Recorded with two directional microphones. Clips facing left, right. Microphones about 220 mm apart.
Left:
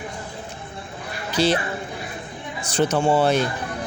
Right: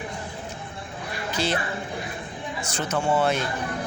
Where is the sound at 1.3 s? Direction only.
30° left (ahead or behind).